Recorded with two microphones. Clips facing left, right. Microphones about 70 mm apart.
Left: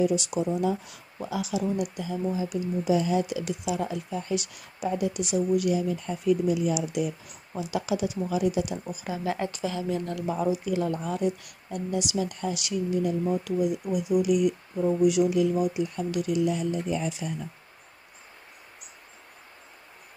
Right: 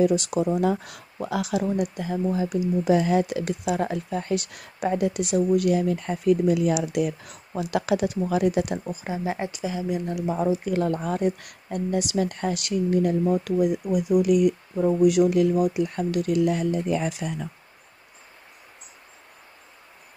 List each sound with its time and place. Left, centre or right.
0.0 s speech: right
1.7 s speech: right
8.9 s speech: right
10.6 s speech: right